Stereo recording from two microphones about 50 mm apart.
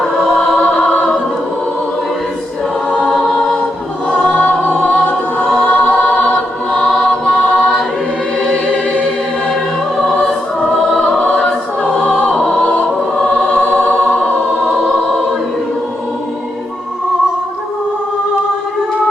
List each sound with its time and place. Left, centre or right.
0.0 s choir: centre
3.1 s music: centre
4.1 s choir: left
8.4 s music: centre
11.8 s choir: centre
13.3 s music: left